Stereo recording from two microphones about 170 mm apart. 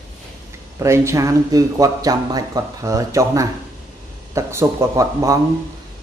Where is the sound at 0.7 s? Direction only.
15° right (ahead or behind).